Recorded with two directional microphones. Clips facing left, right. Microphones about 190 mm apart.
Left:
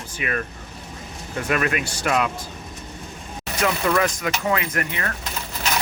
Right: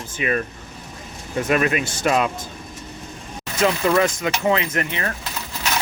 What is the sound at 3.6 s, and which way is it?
Speech, 25° right (ahead or behind).